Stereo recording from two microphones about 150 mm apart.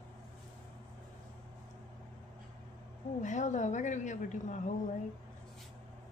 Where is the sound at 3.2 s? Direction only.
55° left (ahead or behind).